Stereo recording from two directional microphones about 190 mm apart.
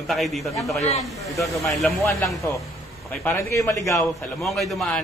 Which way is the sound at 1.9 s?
15° left (ahead or behind).